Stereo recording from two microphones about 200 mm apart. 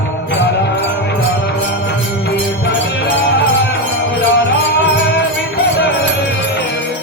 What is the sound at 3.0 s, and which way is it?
Music, 60° left (ahead or behind).